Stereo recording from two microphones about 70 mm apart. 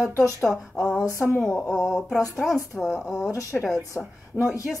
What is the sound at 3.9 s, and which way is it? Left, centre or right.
Speech, left.